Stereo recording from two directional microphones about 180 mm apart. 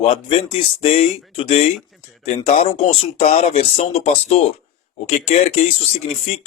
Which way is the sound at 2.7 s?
35° left (ahead or behind).